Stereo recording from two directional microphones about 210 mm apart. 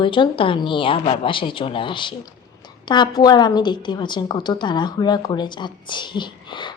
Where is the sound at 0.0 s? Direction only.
25° left (ahead or behind).